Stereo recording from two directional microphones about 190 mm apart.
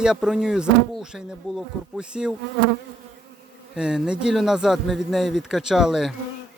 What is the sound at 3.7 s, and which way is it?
Speech, 5° right (ahead or behind).